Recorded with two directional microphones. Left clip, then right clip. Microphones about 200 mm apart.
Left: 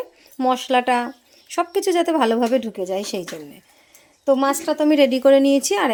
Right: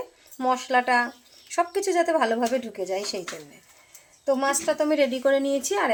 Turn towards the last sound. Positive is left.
turn(degrees=45)  # may be behind; listen again after turning